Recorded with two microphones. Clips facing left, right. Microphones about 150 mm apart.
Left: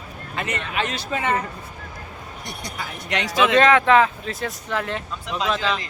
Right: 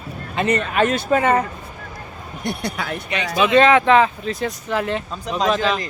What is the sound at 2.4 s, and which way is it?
Speech, 60° right (ahead or behind).